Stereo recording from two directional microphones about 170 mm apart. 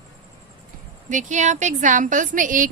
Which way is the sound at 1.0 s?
45° right (ahead or behind).